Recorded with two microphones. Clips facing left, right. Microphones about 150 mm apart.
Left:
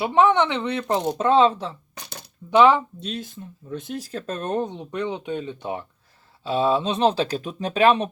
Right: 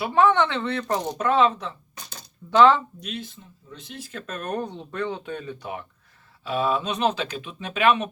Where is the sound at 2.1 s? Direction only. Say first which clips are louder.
Left 4 dB; 65° left (ahead or behind).